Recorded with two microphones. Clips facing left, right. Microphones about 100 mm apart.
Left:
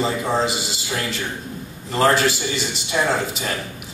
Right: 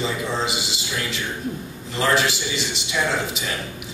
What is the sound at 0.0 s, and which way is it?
A man's voice, 45° left (ahead or behind).